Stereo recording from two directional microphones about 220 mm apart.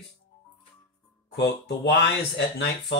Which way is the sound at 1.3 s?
50° left (ahead or behind).